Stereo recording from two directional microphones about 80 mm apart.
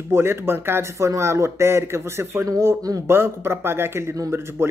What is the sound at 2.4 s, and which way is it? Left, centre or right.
Speech, right.